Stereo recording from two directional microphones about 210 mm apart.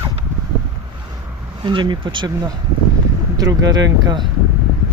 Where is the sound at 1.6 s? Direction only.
20° right (ahead or behind).